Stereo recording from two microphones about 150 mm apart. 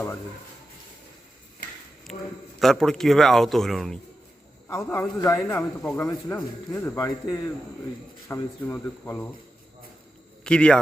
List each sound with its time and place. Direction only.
2.1 s a man's voice: 5° left (ahead or behind)
4.7 s a man's voice: 20° left (ahead or behind)
5.8 s a man's voice: 5° left (ahead or behind)
6.1 s a man's voice: 20° left (ahead or behind)
10.4 s speech: 5° left (ahead or behind)